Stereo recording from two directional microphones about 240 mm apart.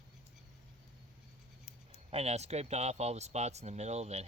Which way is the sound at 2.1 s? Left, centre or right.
Right.